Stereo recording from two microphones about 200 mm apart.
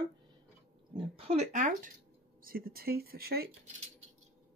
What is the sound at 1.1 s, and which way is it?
Speech, 30° right (ahead or behind).